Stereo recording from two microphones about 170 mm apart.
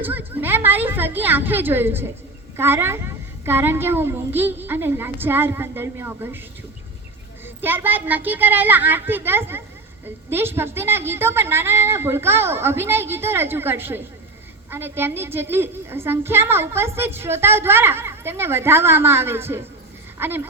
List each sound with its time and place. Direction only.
0.0 s a woman's voice: 10° right (ahead or behind)
7.4 s a woman's voice: 10° right (ahead or behind)